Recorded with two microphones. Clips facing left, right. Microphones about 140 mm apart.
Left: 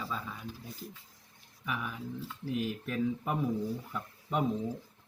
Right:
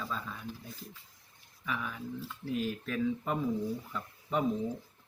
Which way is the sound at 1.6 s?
10° left (ahead or behind).